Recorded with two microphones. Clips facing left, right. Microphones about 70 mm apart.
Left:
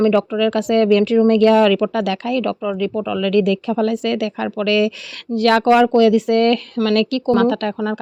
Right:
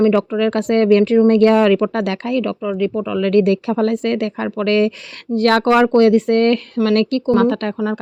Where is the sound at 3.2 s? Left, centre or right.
Right.